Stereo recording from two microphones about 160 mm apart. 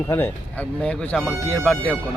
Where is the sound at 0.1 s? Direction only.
10° left (ahead or behind).